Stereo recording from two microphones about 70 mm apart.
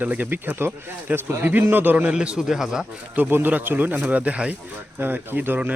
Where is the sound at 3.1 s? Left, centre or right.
Right.